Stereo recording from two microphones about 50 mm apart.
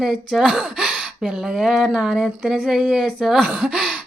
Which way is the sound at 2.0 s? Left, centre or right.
Centre.